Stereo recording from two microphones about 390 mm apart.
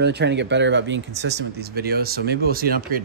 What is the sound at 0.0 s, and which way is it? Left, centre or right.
Speech, right.